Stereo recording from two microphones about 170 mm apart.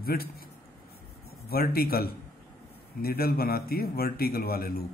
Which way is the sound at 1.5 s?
60° left (ahead or behind).